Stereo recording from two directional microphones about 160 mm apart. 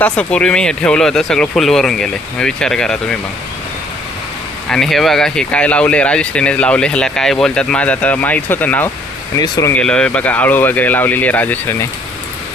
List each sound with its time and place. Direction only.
0.0 s speech: 5° left (ahead or behind)
4.7 s speech: centre (ahead or behind); by 9.7 s 20° left (ahead or behind)
9.7 s speech: 5° left (ahead or behind)